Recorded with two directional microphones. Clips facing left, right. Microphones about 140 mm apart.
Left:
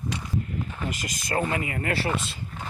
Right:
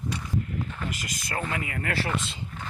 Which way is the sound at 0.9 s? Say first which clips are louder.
Left 5 dB; 35° left (ahead or behind).